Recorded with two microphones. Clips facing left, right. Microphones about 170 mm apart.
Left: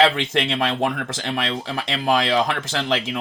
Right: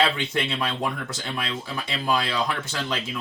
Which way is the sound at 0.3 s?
90° left.